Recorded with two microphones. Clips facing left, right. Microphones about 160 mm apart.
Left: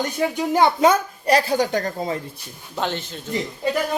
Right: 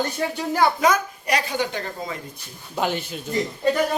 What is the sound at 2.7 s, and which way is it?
Speech, 10° right (ahead or behind).